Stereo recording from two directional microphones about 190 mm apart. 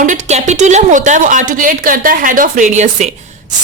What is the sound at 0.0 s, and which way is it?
A woman's voice, 40° right (ahead or behind).